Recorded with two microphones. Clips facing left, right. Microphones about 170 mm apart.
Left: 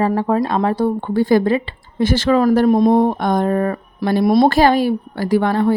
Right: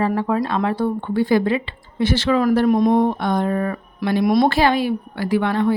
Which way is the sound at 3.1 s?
45° left (ahead or behind).